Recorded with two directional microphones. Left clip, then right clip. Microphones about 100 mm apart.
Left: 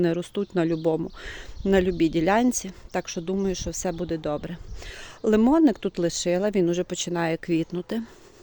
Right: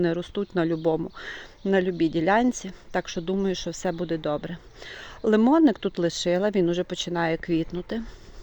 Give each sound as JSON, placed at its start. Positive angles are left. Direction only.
{"t": 0.0, "sound": "speech", "side_deg": 40}